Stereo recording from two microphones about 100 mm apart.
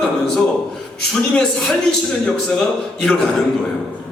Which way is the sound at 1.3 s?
5° left (ahead or behind).